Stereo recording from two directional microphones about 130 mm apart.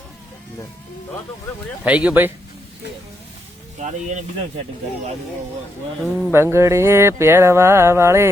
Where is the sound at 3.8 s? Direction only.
65° right (ahead or behind).